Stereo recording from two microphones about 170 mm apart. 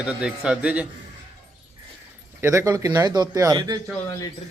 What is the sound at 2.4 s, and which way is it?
Speech, 15° right (ahead or behind).